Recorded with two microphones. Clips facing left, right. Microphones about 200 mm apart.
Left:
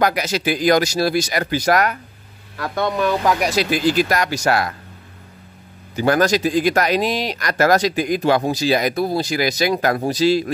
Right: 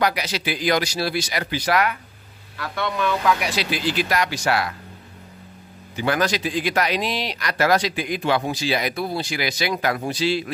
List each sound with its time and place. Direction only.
0.0 s speech: 45° left (ahead or behind)
5.9 s speech: 45° left (ahead or behind)